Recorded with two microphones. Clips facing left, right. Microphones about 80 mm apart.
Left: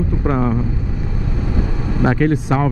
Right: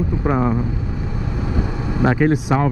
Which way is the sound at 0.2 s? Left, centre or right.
Centre.